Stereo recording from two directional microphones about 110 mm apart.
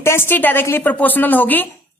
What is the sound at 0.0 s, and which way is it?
A woman's voice, 20° left (ahead or behind).